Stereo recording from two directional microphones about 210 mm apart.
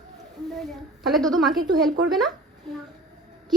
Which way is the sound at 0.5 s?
Centre (ahead or behind).